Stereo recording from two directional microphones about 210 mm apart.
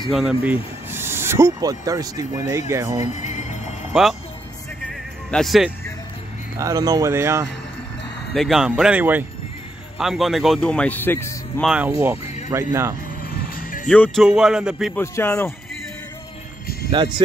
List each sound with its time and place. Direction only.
0.1 s speech: 5° right (ahead or behind)
3.1 s music: 35° left (ahead or behind)
3.9 s speech: centre (ahead or behind)
5.3 s speech: centre (ahead or behind)
6.5 s speech: 15° right (ahead or behind)
8.3 s speech: centre (ahead or behind)
11.6 s speech: 5° right (ahead or behind)
13.6 s music: 40° left (ahead or behind)
13.8 s speech: 5° left (ahead or behind)
15.0 s speech: 10° left (ahead or behind)